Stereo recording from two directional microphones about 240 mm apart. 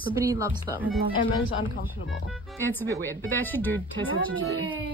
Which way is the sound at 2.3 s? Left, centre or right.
Centre.